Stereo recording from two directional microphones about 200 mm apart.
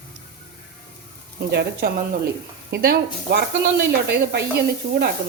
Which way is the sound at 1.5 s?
55° right (ahead or behind).